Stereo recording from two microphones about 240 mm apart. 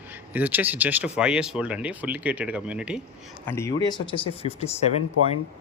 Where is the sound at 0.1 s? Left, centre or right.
Centre.